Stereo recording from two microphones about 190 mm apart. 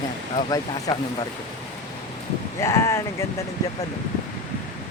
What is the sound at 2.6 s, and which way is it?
Speech, 15° left (ahead or behind).